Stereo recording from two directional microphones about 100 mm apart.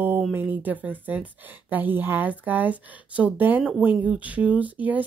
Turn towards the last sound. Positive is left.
turn(degrees=-15)  # may be behind; listen again after turning